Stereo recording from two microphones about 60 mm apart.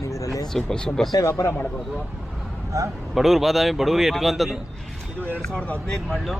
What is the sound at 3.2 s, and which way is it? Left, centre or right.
Speech, centre.